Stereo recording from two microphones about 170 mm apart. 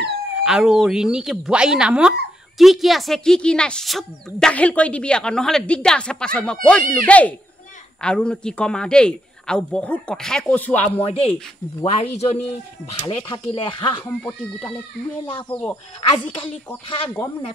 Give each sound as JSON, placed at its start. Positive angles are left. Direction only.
{"t": 0.4, "sound": "speech", "side_deg": -5}
{"t": 11.1, "sound": "speech", "side_deg": 35}
{"t": 15.3, "sound": "speech", "side_deg": 20}
{"t": 16.4, "sound": "speech", "side_deg": 10}